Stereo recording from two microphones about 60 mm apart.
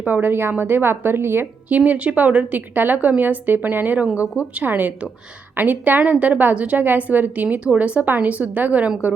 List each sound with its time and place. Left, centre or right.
0.0 s a woman's voice: right
1.7 s a woman's voice: right